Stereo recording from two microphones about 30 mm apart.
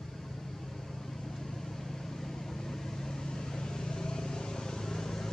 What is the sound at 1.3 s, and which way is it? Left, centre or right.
Vehicle, centre.